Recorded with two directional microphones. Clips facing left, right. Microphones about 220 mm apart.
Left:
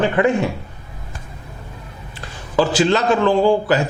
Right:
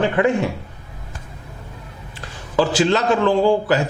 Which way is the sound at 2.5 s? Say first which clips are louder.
Left 1 dB; 10° left (ahead or behind).